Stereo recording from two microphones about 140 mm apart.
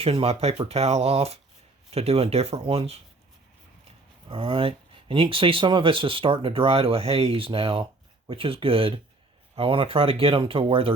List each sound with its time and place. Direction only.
0.0 s speech: 40° right (ahead or behind)